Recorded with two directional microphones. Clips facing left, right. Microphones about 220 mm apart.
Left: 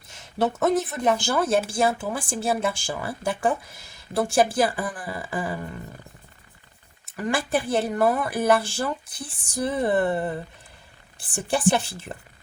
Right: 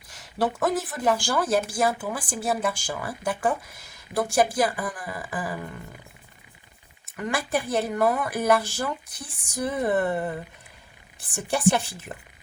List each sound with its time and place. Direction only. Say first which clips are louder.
0.1 s speech: left 2 dB; 25° left (ahead or behind)
7.2 s speech: left 2 dB; 30° left (ahead or behind)